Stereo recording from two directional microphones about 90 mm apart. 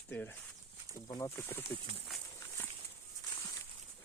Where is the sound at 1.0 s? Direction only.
40° left (ahead or behind).